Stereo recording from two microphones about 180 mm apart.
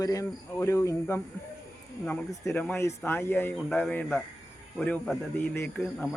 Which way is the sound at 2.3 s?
15° left (ahead or behind).